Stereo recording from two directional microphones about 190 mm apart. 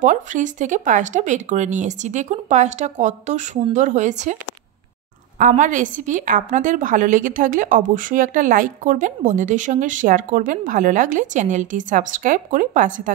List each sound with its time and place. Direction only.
0.0 s speech: 40° right (ahead or behind)
5.4 s a woman's voice: 40° right (ahead or behind)